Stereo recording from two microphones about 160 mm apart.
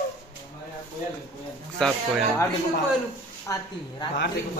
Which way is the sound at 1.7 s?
5° left (ahead or behind).